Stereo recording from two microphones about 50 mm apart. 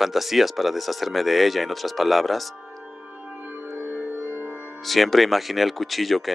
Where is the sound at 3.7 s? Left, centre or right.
Right.